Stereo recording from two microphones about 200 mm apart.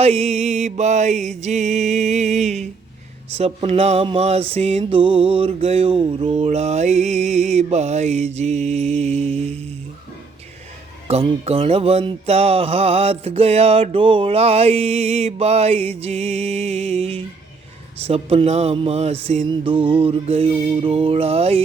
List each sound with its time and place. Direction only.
0.0 s mantra: 30° right (ahead or behind)
11.1 s mantra: 30° right (ahead or behind)
18.0 s a sound: 30° right (ahead or behind)